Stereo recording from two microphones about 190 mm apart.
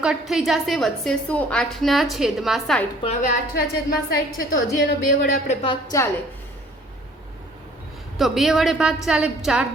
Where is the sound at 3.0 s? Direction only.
35° left (ahead or behind).